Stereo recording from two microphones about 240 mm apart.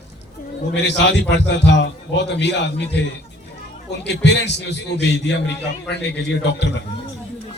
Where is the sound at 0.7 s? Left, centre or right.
Left.